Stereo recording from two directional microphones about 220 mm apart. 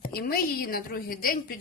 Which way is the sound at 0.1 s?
45° left (ahead or behind).